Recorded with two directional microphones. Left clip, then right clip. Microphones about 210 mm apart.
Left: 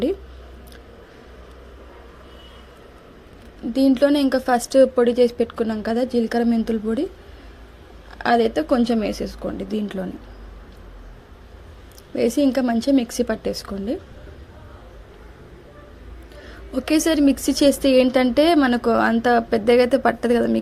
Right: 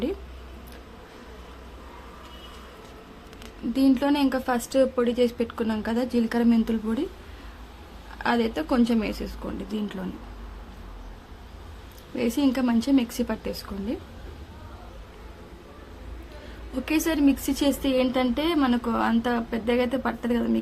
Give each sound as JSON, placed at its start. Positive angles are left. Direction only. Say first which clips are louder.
{"t": 3.7, "sound": "a woman's voice", "louder": "left 6 dB", "side_deg": 20}
{"t": 8.2, "sound": "speech", "louder": "left 7 dB", "side_deg": 20}
{"t": 12.1, "sound": "speech", "louder": "left 6 dB", "side_deg": 20}
{"t": 16.8, "sound": "speech", "louder": "left 5 dB", "side_deg": 20}